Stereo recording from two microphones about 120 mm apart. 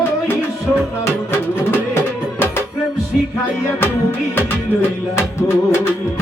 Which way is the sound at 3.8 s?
20° left (ahead or behind).